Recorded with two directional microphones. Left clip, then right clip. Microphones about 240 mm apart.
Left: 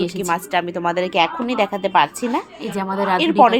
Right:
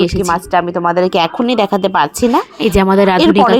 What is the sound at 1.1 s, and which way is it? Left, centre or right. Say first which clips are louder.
A woman's voice: right 5 dB; right.